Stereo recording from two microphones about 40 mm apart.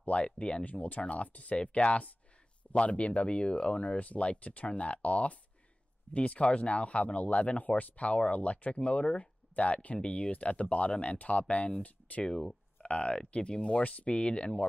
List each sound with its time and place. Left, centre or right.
0.0 s speech: left
0.7 s speech: left
12.3 s speech: centre